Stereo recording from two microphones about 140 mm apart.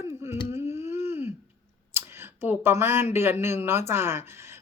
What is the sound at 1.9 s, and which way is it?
Speech, 15° right (ahead or behind).